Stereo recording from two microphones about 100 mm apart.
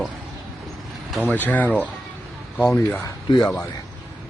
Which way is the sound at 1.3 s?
15° left (ahead or behind).